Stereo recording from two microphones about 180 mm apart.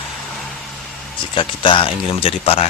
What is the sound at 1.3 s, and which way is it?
Speech, 30° left (ahead or behind).